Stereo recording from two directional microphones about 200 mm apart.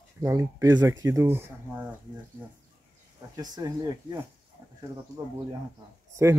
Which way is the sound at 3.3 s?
20° right (ahead or behind).